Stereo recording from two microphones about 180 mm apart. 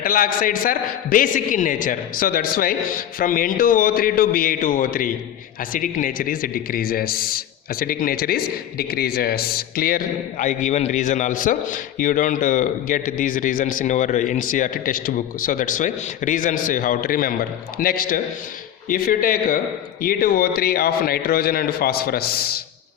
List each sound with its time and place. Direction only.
0.0 s a man's voice: 50° left (ahead or behind)